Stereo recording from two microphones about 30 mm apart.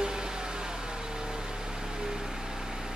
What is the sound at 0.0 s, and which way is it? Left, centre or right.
Vehicle, right.